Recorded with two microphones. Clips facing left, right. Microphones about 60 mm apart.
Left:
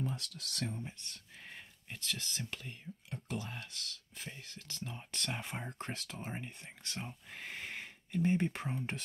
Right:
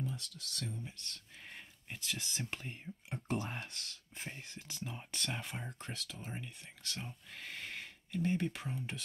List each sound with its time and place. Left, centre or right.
0.0 s speech: left
0.9 s speech: centre
1.9 s speech: centre
5.4 s speech: centre
5.8 s speech: left
6.3 s speech: left
8.7 s speech: left